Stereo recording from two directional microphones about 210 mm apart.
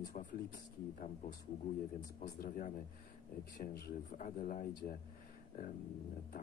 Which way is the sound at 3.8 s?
40° left (ahead or behind).